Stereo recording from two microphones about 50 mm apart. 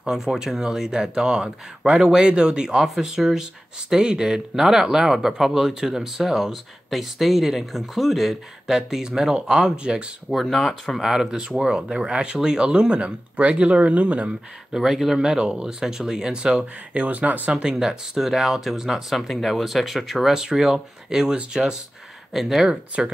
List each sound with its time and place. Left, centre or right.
0.1 s speech: centre
10.3 s speech: centre
11.0 s speech: centre; by 14.3 s right
14.8 s speech: centre
17.0 s speech: right
17.5 s speech: centre